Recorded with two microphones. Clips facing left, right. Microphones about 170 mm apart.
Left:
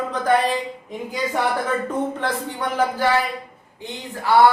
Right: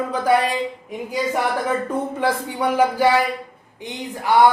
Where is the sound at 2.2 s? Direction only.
10° right (ahead or behind).